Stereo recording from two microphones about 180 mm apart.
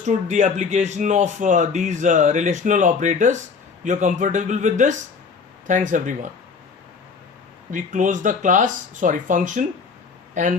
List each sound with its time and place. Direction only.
0.0 s speech: 40° right (ahead or behind)
7.7 s speech: 45° right (ahead or behind)